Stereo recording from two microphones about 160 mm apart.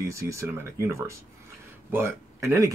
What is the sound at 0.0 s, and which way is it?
Speech, 20° right (ahead or behind).